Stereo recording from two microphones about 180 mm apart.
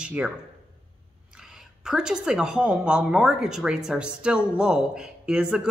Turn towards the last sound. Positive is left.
turn(degrees=-5)  # may be behind; listen again after turning